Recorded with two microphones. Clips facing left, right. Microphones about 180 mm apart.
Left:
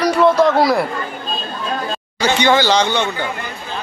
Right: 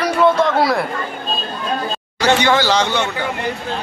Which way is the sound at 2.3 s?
Centre (ahead or behind).